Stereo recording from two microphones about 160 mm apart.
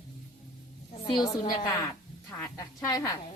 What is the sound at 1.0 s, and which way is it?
A woman's voice, 30° left (ahead or behind).